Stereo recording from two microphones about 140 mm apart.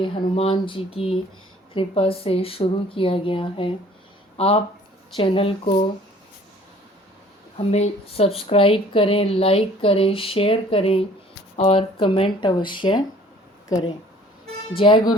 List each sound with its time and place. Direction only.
0.0 s speech: 45° left (ahead or behind)
7.7 s speech: 50° left (ahead or behind)